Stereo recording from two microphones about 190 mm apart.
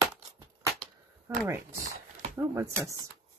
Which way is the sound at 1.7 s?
45° right (ahead or behind).